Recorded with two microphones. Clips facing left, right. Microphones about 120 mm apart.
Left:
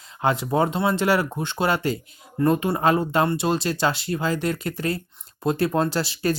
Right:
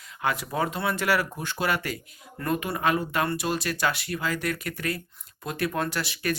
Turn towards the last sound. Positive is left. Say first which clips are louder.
# left 5 dB
turn(degrees=30)  # may be behind; listen again after turning